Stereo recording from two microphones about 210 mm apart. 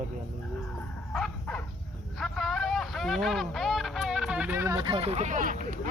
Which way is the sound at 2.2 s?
Centre (ahead or behind).